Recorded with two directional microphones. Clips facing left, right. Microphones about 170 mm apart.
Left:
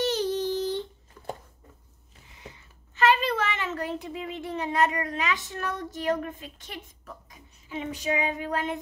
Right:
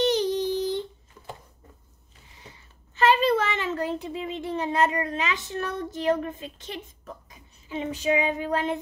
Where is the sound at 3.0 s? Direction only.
30° right (ahead or behind).